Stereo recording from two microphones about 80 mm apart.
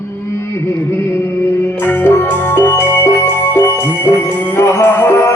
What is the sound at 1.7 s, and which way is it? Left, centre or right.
Music, left.